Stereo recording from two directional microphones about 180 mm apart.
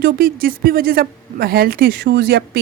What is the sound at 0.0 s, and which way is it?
Speech, 55° right (ahead or behind).